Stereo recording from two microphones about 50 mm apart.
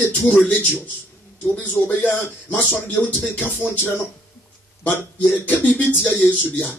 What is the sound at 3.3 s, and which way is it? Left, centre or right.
A man's voice, left.